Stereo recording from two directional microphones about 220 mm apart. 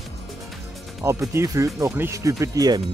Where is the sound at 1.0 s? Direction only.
15° right (ahead or behind).